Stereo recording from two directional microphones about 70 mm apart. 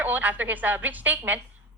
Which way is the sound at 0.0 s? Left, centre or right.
Right.